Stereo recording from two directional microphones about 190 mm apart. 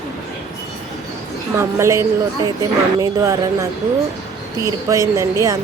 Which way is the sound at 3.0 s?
15° right (ahead or behind).